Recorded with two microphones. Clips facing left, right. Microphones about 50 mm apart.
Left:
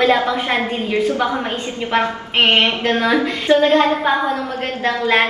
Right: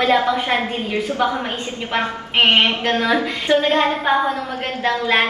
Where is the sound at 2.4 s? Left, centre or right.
Right.